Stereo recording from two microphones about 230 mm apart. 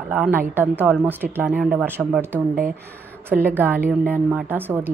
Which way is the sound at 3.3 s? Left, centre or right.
Centre.